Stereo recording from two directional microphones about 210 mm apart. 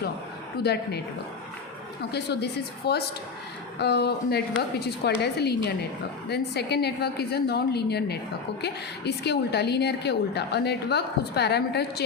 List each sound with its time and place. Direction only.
0.6 s a woman's voice: 50° left (ahead or behind)